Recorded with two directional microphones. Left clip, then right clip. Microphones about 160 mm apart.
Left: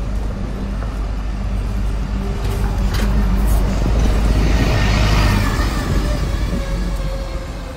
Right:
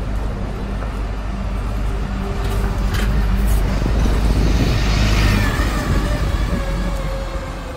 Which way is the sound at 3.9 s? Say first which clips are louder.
Left 1 dB; 45° left (ahead or behind).